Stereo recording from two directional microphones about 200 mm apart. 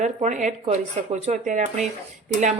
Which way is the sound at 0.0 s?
35° right (ahead or behind).